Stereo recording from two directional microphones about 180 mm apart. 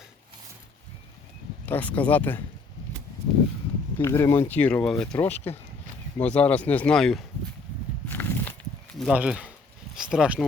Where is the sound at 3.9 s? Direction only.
15° left (ahead or behind).